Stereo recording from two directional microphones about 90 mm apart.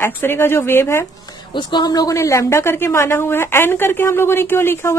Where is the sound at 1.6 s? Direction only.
55° left (ahead or behind).